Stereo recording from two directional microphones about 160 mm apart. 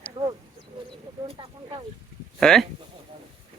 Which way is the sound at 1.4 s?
30° right (ahead or behind).